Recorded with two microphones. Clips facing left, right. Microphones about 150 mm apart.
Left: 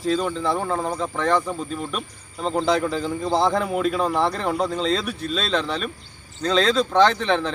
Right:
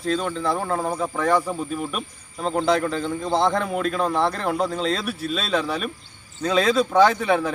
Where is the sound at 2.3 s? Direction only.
5° left (ahead or behind).